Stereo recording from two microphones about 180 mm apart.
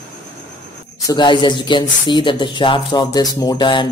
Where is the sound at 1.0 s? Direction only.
20° left (ahead or behind).